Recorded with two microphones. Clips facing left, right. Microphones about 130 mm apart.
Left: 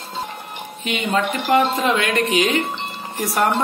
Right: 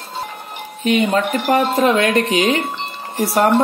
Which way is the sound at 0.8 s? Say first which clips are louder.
Right 5 dB; 40° right (ahead or behind).